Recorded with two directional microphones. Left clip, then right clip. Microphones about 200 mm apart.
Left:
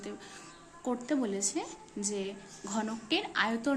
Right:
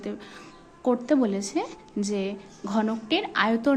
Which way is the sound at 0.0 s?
15° right (ahead or behind).